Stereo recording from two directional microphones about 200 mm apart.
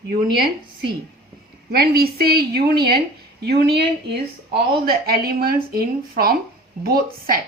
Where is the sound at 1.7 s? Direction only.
50° right (ahead or behind).